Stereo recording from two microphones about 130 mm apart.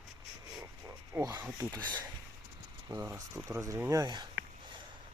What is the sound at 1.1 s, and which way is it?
Speech, 20° right (ahead or behind).